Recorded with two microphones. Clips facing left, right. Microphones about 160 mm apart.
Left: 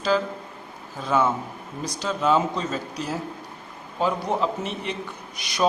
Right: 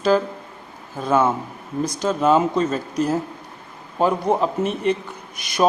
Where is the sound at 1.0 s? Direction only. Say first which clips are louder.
Right 4 dB; 50° right (ahead or behind).